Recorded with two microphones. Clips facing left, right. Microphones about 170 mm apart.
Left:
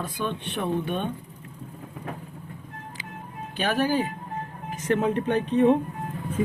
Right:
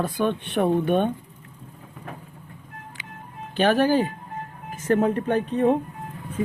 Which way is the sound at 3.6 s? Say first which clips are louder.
Right 5 dB; 50° right (ahead or behind).